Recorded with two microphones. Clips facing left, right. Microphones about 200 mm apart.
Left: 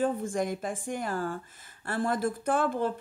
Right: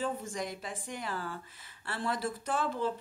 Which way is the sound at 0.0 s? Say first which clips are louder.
Left 7 dB; 50° left (ahead or behind).